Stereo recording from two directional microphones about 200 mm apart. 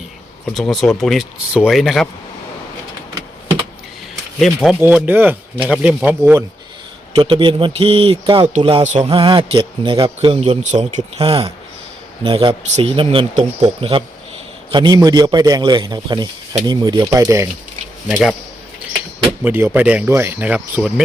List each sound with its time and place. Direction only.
0.5 s speech: centre (ahead or behind)
4.4 s speech: centre (ahead or behind)
7.2 s speech: 25° right (ahead or behind)
18.1 s speech: centre (ahead or behind)
19.5 s speech: 10° right (ahead or behind)